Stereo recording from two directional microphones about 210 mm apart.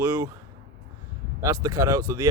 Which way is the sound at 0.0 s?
15° right (ahead or behind).